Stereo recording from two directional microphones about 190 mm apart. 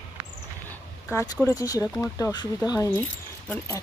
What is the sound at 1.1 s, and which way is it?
Speech, 15° left (ahead or behind).